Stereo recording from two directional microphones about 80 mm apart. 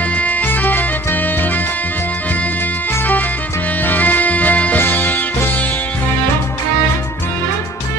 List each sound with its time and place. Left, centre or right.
0.1 s music: centre
3.8 s music: left